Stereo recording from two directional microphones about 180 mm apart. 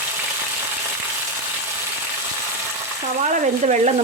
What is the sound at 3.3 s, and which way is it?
Speech, 45° right (ahead or behind).